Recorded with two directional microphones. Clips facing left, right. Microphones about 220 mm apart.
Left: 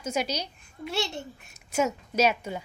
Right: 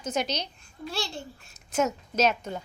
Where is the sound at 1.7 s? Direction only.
10° left (ahead or behind).